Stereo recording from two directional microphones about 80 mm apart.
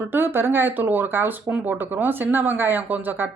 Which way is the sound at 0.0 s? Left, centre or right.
Right.